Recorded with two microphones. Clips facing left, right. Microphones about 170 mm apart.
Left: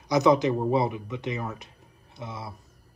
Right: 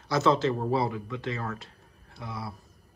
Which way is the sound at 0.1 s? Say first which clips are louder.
Left 3 dB; 15° left (ahead or behind).